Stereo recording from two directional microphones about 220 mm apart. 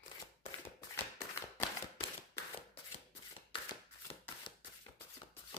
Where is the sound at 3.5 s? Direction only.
20° left (ahead or behind).